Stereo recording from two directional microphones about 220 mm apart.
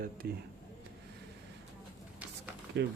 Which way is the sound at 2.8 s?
50° right (ahead or behind).